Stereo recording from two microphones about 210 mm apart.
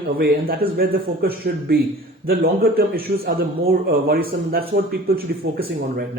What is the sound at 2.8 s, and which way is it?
Speech, 45° right (ahead or behind).